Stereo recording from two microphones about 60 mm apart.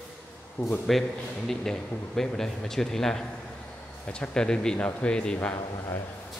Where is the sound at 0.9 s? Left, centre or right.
Centre.